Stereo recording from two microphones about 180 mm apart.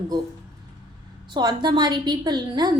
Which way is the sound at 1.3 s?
25° right (ahead or behind).